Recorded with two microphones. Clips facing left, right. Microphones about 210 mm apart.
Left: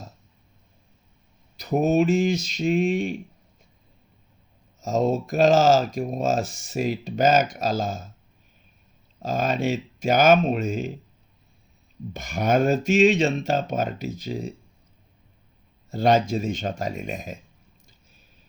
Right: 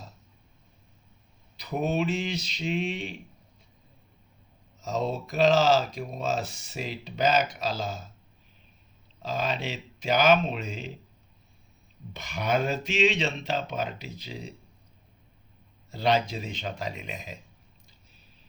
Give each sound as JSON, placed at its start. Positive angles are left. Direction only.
{"t": 1.5, "sound": "speech", "side_deg": 45}
{"t": 4.8, "sound": "speech", "side_deg": 45}
{"t": 9.2, "sound": "speech", "side_deg": 45}
{"t": 12.1, "sound": "speech", "side_deg": 45}
{"t": 15.9, "sound": "speech", "side_deg": 45}